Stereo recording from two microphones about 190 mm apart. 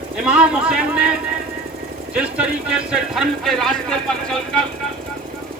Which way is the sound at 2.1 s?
5° right (ahead or behind).